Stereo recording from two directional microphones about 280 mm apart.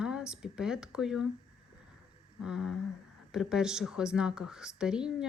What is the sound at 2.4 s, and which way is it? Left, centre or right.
Speech, centre.